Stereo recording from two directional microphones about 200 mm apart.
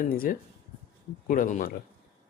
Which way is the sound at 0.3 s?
45° left (ahead or behind).